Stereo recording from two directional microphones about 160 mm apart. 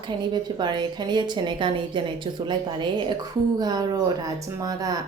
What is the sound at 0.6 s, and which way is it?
Speech, 30° right (ahead or behind).